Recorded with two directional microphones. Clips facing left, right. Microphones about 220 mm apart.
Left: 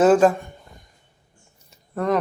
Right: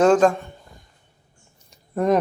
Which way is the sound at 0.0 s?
5° left (ahead or behind).